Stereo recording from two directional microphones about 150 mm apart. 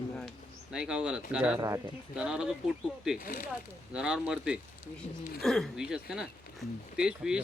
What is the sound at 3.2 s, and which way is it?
Speech, 65° left (ahead or behind).